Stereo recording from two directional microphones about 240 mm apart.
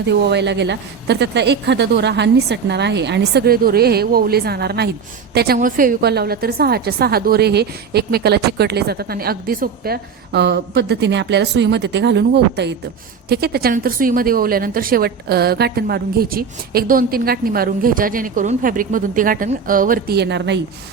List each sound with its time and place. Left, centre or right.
0.0 s a woman's voice: right